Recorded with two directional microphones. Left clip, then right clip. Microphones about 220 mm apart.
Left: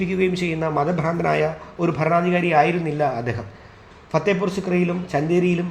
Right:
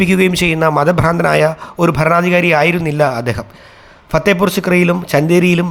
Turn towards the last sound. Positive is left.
turn(degrees=-40)  # may be behind; listen again after turning